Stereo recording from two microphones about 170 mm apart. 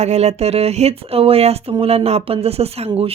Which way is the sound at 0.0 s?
40° right (ahead or behind).